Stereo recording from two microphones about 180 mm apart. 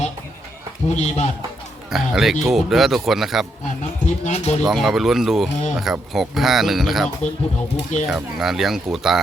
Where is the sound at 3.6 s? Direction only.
40° left (ahead or behind).